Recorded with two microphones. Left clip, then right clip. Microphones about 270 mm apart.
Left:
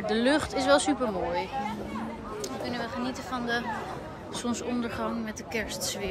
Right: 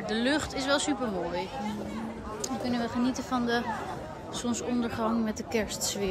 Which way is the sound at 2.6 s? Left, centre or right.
Right.